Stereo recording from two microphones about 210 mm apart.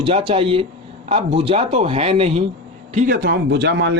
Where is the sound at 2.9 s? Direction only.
45° right (ahead or behind).